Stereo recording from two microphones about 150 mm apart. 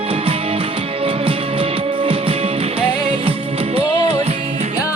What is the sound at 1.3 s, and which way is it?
Music, 40° right (ahead or behind).